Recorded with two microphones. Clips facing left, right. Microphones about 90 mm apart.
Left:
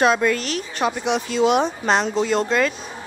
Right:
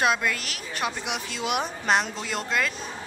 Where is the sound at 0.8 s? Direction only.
35° left (ahead or behind).